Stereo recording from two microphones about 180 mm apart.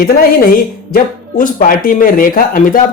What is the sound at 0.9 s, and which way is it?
Speech, 50° left (ahead or behind).